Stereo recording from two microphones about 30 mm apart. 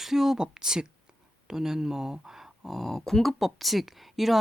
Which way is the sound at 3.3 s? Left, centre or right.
Centre.